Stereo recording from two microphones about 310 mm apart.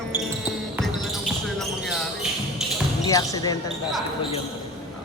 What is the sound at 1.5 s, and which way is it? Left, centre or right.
Basketball bounce, centre.